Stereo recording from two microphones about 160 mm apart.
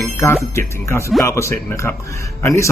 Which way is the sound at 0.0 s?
15° left (ahead or behind).